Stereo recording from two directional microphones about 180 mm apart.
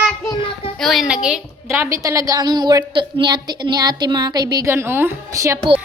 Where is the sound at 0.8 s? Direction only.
Centre (ahead or behind); by 5.6 s 15° right (ahead or behind).